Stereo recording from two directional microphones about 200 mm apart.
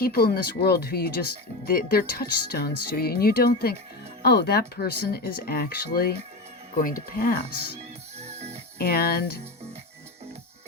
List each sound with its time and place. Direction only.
0.0 s speech: 50° left (ahead or behind)
8.2 s music: 30° right (ahead or behind)
8.8 s speech: 50° left (ahead or behind)